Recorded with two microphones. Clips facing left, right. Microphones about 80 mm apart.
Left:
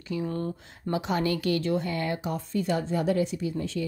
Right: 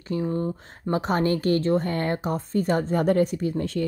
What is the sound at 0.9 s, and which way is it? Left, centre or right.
Speech, right.